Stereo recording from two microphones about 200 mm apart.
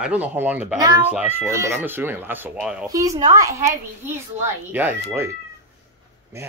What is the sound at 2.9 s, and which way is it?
Speech, 15° right (ahead or behind).